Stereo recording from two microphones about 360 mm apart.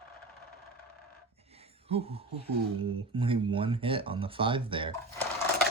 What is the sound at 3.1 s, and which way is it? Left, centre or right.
Speech, centre.